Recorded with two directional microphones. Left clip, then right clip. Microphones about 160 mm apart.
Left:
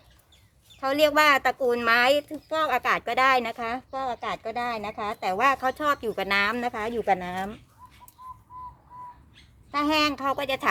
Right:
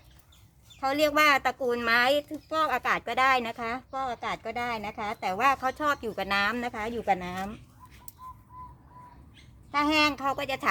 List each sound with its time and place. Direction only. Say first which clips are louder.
0.8 s speech: left 3 dB; 25° left (ahead or behind)
9.7 s speech: left 1 dB; 20° left (ahead or behind)